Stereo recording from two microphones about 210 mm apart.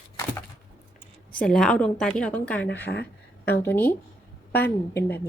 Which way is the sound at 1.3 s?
5° left (ahead or behind).